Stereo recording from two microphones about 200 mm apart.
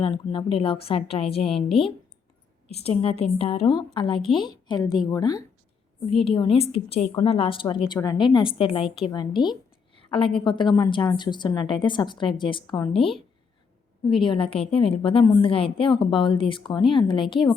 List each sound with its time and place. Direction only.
0.0 s a woman's voice: 25° left (ahead or behind)